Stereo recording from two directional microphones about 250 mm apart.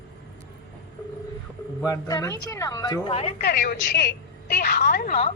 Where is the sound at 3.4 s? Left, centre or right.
Left.